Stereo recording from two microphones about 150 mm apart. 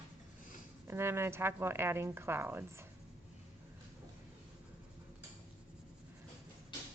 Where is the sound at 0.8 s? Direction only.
15° right (ahead or behind).